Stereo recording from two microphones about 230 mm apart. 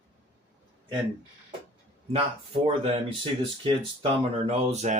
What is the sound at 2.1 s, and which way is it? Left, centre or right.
Speech, right.